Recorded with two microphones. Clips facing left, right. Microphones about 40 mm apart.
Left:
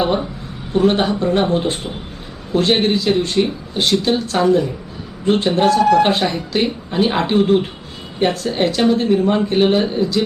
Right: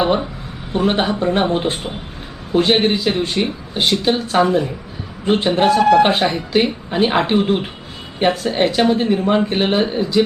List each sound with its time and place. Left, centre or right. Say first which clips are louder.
0.0 s speech: right 1 dB; centre